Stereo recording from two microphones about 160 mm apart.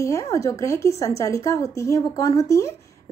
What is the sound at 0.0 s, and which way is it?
A woman's voice, 20° left (ahead or behind).